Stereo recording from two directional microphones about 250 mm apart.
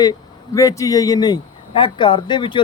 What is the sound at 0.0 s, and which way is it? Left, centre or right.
Speech, centre.